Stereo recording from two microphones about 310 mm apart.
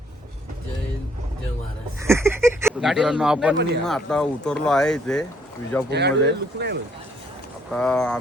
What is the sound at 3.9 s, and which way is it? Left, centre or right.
Speech, centre.